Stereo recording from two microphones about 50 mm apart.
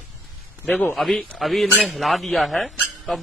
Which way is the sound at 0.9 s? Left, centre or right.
Centre.